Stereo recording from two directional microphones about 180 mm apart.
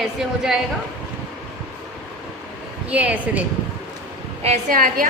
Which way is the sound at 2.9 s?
10° right (ahead or behind).